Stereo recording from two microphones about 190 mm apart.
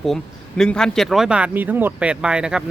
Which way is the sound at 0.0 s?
Centre (ahead or behind).